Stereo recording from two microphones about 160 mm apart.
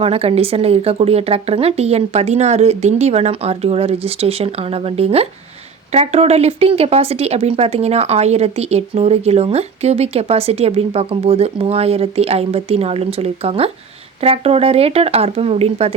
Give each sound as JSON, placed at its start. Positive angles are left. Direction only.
{"t": 0.0, "sound": "speech", "side_deg": -35}